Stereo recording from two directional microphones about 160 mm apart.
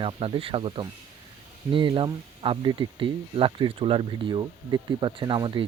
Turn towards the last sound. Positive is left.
turn(degrees=-30)  # may be behind; listen again after turning